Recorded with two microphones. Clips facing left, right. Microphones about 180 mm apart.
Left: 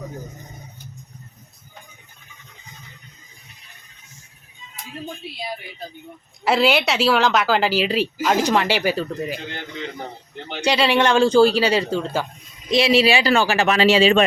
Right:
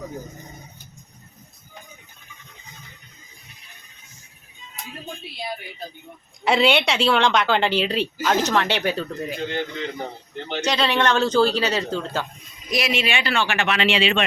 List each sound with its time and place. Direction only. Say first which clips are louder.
6.4 s a man's voice: left 1 dB; centre (ahead or behind)
10.5 s a man's voice: left 3 dB; 10° left (ahead or behind)
12.7 s a man's voice: left 7 dB; 35° left (ahead or behind)